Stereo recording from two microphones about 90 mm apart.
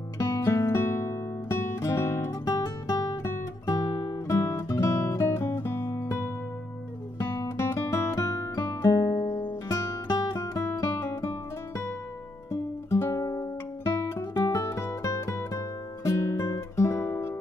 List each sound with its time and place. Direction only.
0.2 s music: 30° left (ahead or behind)
7.5 s guitar: 25° left (ahead or behind)
9.4 s music: 40° left (ahead or behind)